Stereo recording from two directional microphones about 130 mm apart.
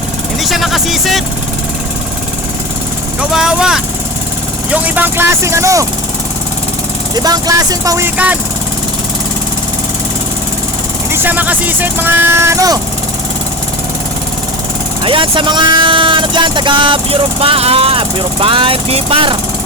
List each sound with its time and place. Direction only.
0.4 s speech: centre (ahead or behind)
3.2 s speech: 5° right (ahead or behind); by 5.8 s 25° right (ahead or behind)
7.2 s speech: 30° right (ahead or behind)
11.1 s speech: 15° right (ahead or behind)
15.0 s speech: 40° right (ahead or behind)